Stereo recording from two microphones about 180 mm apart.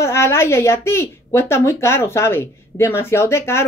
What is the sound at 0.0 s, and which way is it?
Speech, 15° left (ahead or behind).